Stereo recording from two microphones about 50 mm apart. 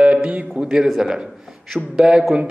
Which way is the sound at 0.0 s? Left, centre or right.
Right.